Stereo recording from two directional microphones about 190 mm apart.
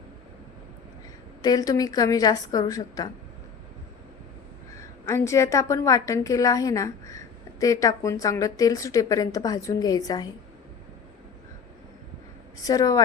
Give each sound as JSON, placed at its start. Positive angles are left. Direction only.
{"t": 1.4, "sound": "a woman's voice", "side_deg": 20}
{"t": 4.8, "sound": "speech", "side_deg": 15}
{"t": 12.6, "sound": "a woman's voice", "side_deg": 20}